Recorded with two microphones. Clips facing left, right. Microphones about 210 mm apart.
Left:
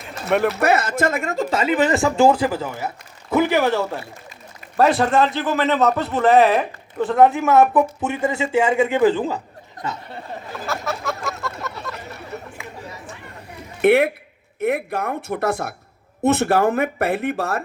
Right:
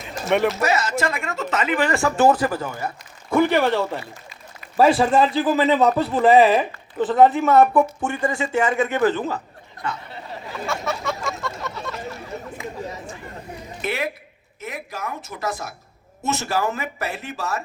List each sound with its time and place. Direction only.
0.3 s a man's voice: centre (ahead or behind)
0.6 s speech: 55° left (ahead or behind); by 2.0 s 25° left (ahead or behind)
2.0 s a man's voice: 10° left (ahead or behind)
9.8 s speech: 45° left (ahead or behind)
10.6 s a sound: centre (ahead or behind)
13.8 s speech: 60° left (ahead or behind)